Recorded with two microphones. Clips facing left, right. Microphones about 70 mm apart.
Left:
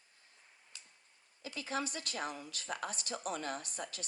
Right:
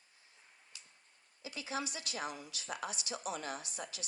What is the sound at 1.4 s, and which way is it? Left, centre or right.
A woman's voice, left.